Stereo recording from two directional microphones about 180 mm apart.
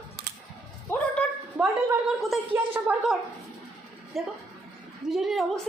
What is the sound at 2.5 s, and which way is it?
Speech, 10° right (ahead or behind).